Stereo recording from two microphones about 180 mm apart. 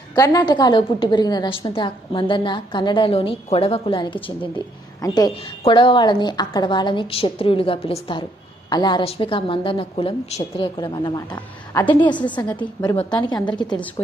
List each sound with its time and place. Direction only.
0.2 s a woman's voice: 20° left (ahead or behind)